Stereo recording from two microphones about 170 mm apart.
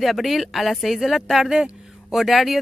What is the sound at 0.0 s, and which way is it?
A woman's voice, centre (ahead or behind).